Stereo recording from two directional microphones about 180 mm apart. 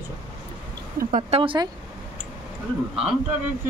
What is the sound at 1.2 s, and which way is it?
Speech, 30° right (ahead or behind).